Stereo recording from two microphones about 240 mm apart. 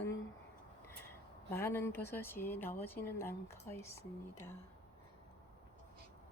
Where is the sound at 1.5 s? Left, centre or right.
Centre.